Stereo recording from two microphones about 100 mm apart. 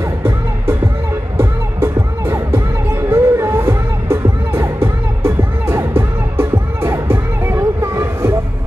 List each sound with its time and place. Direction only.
1.4 s music: 25° right (ahead or behind)